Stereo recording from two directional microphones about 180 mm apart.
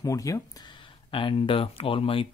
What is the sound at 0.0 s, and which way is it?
Speech, 20° left (ahead or behind).